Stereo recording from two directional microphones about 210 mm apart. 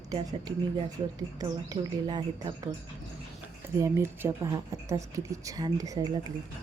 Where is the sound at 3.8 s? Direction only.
15° right (ahead or behind).